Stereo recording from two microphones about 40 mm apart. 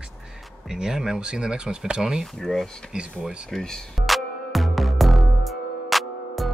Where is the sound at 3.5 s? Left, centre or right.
Centre.